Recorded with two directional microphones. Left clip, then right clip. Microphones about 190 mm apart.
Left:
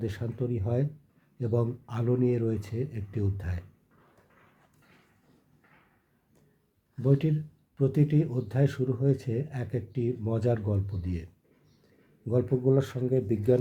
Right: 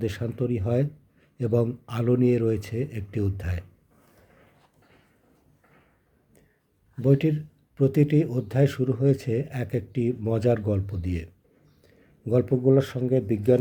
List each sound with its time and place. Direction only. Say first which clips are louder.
0.0 s speech: right 5 dB; 30° right (ahead or behind)
6.9 s speech: right 5 dB; 30° right (ahead or behind)